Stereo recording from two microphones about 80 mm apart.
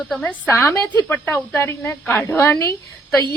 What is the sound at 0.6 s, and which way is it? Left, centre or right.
A woman's voice, left.